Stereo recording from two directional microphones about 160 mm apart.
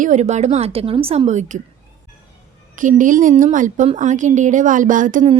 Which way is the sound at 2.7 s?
55° right (ahead or behind).